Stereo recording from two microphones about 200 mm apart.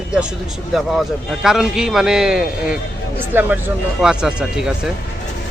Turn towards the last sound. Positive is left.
turn(degrees=0)  # may be behind; listen again after turning